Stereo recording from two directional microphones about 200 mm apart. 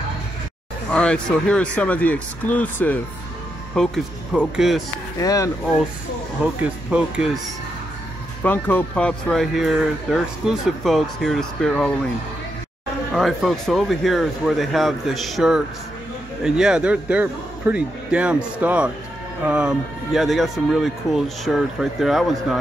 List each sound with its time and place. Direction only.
0.9 s speech: 5° left (ahead or behind)
5.2 s speech: 15° left (ahead or behind)
6.4 s speech: 5° right (ahead or behind)
8.4 s speech: 10° left (ahead or behind)
13.1 s speech: centre (ahead or behind)